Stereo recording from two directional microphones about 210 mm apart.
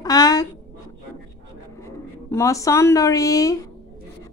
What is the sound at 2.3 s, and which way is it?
A woman's voice, 15° left (ahead or behind).